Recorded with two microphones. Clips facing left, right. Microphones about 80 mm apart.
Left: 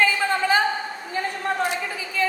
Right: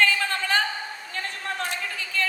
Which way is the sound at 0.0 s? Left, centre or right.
Centre.